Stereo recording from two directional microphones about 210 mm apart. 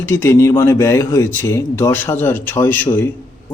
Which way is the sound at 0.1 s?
10° left (ahead or behind).